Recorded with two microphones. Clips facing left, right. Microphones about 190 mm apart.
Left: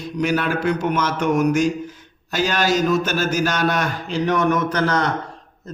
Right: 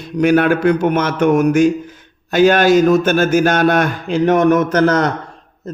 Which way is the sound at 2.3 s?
55° right (ahead or behind).